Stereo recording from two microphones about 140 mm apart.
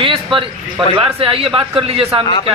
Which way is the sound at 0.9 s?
40° right (ahead or behind).